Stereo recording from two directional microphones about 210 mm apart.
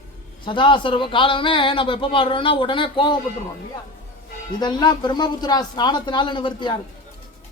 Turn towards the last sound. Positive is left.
turn(degrees=20)  # may be behind; listen again after turning